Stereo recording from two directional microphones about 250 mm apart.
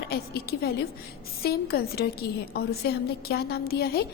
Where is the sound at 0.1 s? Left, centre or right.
Left.